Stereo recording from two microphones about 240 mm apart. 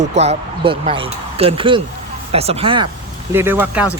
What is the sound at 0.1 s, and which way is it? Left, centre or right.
Speech, right.